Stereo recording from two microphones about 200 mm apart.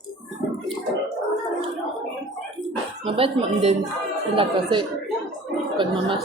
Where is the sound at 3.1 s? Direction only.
30° right (ahead or behind).